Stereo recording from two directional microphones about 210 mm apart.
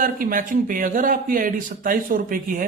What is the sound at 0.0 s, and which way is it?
A man's voice, 40° right (ahead or behind).